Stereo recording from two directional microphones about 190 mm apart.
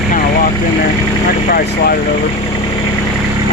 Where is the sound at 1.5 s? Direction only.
50° left (ahead or behind).